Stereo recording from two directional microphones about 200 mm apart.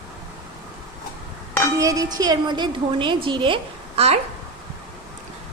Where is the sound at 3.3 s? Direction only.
25° right (ahead or behind).